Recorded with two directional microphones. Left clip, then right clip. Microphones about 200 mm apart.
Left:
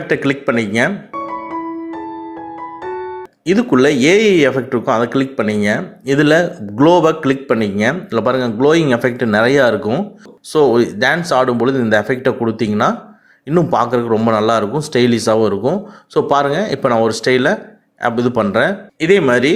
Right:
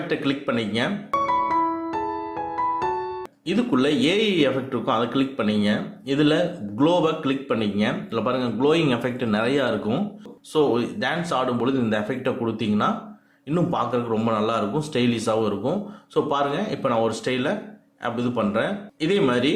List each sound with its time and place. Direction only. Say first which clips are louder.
0.1 s speech: left 10 dB; 35° left (ahead or behind)
3.4 s speech: left 10 dB; 35° left (ahead or behind)